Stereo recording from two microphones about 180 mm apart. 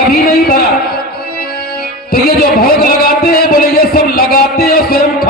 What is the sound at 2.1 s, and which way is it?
Music, 55° left (ahead or behind).